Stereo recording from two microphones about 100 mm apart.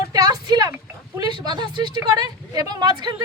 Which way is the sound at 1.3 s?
45° right (ahead or behind).